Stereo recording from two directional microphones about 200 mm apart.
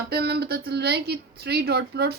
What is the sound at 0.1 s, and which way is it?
Speech, 55° right (ahead or behind).